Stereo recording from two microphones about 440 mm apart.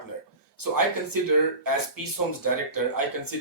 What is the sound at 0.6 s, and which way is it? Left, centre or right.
Speech, right.